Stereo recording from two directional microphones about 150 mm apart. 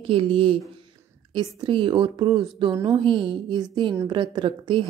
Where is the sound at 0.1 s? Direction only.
35° right (ahead or behind).